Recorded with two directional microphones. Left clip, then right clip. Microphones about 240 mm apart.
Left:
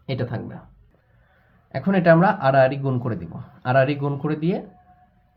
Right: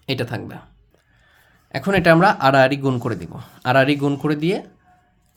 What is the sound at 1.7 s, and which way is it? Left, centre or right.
Speech, right.